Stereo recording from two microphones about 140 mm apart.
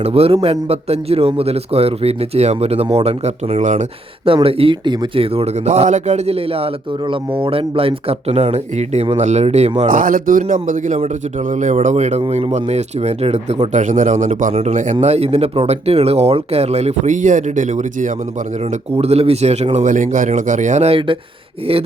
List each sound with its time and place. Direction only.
0.0 s speech: 45° right (ahead or behind)
4.4 s speech: 40° right (ahead or behind)
9.9 s speech: 75° right (ahead or behind)
10.5 s speech: 65° right (ahead or behind)
14.5 s speech: 55° right (ahead or behind)
15.0 s speech: 50° right (ahead or behind)
18.7 s speech: 50° right (ahead or behind)
19.7 s speech: 65° right (ahead or behind); by 21.2 s 45° right (ahead or behind)